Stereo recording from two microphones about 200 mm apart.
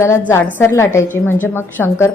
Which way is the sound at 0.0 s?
15° left (ahead or behind).